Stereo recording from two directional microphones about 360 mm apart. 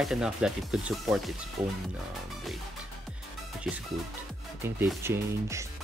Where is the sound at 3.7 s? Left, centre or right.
Centre.